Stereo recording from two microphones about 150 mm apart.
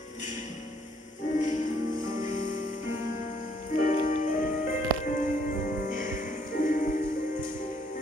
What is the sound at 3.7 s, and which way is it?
Music, 60° left (ahead or behind).